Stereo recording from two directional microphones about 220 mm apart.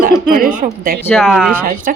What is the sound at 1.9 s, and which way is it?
Speech, 40° right (ahead or behind).